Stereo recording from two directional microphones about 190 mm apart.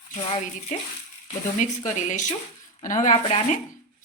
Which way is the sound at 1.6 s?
40° left (ahead or behind).